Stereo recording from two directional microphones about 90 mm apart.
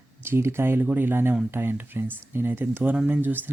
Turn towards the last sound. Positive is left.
turn(degrees=-20)  # may be behind; listen again after turning